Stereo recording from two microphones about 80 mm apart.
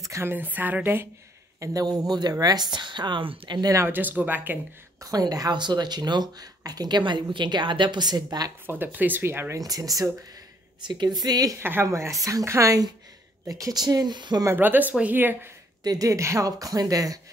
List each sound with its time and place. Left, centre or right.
0.0 s a sound: right
0.3 s speech: right
1.6 s a woman's voice: right
3.7 s speech: right
5.0 s speech: right
7.0 s a woman's voice: right
8.6 s speech: right
9.6 s speech: right
10.8 s speech: right
11.5 s a woman's voice: right
14.6 s speech: right
15.8 s speech: right